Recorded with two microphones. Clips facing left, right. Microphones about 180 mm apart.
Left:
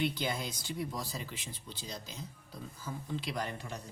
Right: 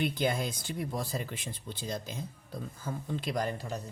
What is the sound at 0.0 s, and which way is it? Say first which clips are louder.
Speech: right 4 dB; 50° right (ahead or behind).